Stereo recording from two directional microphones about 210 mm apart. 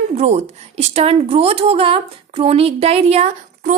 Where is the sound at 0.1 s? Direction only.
30° right (ahead or behind).